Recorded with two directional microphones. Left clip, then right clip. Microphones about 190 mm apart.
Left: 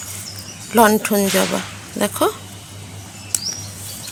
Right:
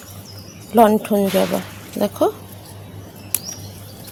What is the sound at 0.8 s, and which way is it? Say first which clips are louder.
Speech: even; 20° right (ahead or behind).